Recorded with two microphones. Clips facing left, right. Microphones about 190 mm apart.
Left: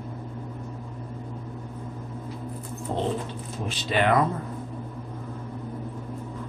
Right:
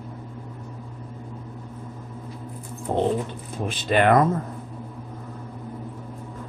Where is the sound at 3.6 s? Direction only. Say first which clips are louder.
Right 4 dB; 50° right (ahead or behind).